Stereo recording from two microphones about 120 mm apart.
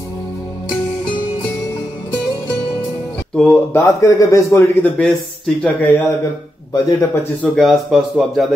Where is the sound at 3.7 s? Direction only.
25° left (ahead or behind).